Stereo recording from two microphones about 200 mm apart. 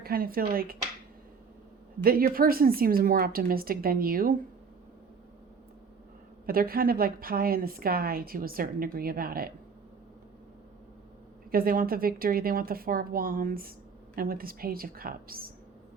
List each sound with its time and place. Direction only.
0.0 s a woman's voice: 45° right (ahead or behind)
2.0 s a woman's voice: 45° right (ahead or behind)
6.4 s a woman's voice: 45° right (ahead or behind)
11.5 s a woman's voice: 45° right (ahead or behind)